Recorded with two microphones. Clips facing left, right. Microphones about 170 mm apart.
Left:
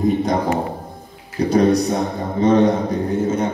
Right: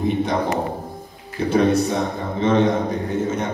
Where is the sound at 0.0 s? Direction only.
40° left (ahead or behind).